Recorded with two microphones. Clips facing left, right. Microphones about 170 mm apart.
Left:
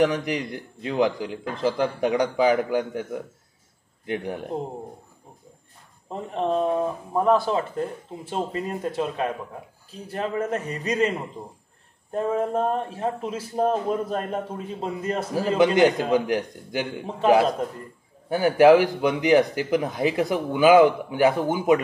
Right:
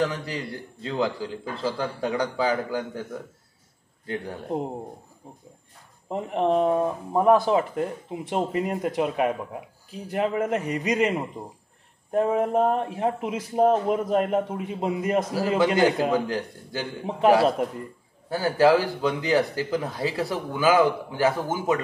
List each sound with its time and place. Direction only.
0.0 s speech: 15° left (ahead or behind)
6.0 s speech: 15° right (ahead or behind)
12.1 s speech: 15° right (ahead or behind)
15.5 s a man's voice: 20° left (ahead or behind)
18.3 s speech: 15° left (ahead or behind)